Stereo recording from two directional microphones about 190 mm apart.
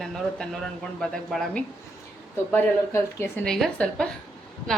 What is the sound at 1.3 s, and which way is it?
Speech, centre (ahead or behind).